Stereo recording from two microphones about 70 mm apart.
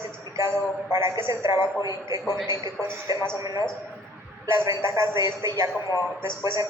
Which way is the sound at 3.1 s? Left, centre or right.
Right.